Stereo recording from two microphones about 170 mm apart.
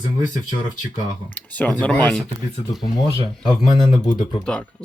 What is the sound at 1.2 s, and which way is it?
Speech, 10° left (ahead or behind).